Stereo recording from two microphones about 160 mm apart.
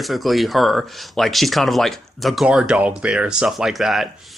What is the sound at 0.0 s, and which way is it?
Speech, centre (ahead or behind).